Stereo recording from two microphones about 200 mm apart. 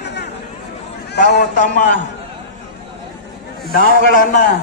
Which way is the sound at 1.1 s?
55° left (ahead or behind).